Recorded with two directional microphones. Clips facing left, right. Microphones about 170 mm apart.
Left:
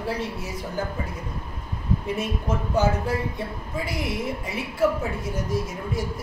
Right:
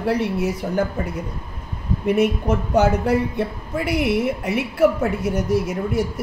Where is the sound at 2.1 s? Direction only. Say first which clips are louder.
Right 12 dB; 70° right (ahead or behind).